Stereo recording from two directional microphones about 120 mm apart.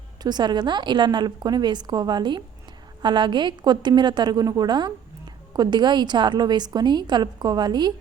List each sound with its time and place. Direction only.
0.2 s a woman's voice: 35° right (ahead or behind)